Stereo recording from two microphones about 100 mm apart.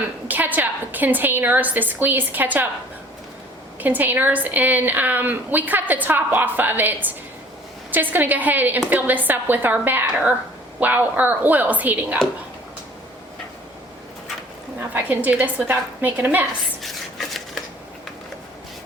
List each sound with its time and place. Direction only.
0.3 s a woman's voice: 15° right (ahead or behind)
3.8 s a woman's voice: 20° right (ahead or behind)
14.9 s a woman's voice: 15° right (ahead or behind)
16.8 s a sound: centre (ahead or behind)